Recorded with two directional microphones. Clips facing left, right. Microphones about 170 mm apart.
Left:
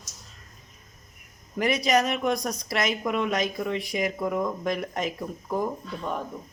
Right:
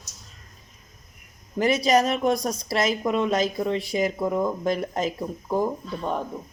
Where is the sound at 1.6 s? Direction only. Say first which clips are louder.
Right 3 dB; 30° right (ahead or behind).